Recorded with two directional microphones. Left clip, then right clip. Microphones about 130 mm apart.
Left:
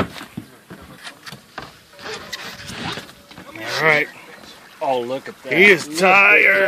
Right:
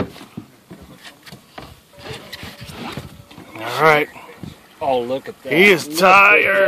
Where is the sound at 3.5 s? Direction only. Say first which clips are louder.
Right 2 dB; 40° right (ahead or behind).